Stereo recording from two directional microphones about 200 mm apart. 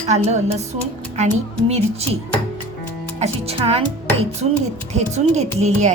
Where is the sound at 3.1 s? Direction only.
30° right (ahead or behind).